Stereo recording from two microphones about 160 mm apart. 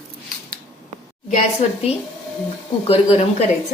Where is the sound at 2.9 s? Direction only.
35° left (ahead or behind).